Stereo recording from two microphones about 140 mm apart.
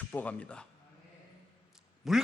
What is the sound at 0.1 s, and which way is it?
Speech, 10° left (ahead or behind).